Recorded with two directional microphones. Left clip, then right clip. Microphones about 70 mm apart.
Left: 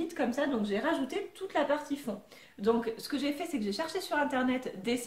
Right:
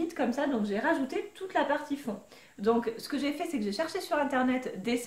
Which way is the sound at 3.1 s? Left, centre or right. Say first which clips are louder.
Right 1 dB; right.